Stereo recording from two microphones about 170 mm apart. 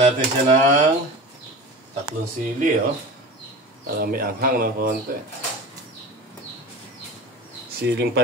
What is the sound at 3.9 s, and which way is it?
Speech, 60° right (ahead or behind).